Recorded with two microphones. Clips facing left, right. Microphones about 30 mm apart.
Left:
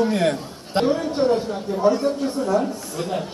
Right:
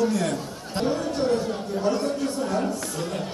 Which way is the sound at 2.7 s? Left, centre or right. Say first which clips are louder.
Left 2 dB; left.